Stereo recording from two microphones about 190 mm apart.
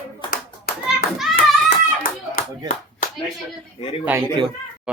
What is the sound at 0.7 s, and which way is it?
Children playing, 55° left (ahead or behind).